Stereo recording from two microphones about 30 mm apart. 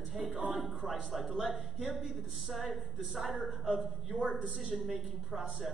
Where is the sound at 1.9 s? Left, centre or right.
Centre.